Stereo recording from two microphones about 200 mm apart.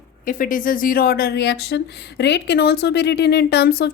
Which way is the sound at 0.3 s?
40° left (ahead or behind).